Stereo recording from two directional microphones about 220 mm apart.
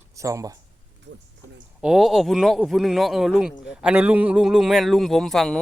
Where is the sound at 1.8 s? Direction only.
Centre (ahead or behind).